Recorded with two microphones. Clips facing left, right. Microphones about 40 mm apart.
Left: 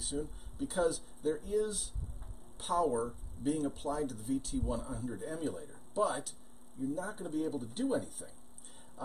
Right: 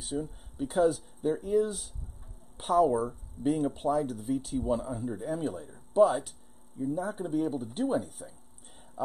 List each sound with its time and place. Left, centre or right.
0.0 s speech: centre
6.8 s speech: right
7.2 s speech: centre